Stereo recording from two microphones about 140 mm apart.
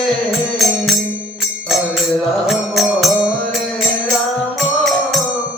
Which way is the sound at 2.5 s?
Centre (ahead or behind).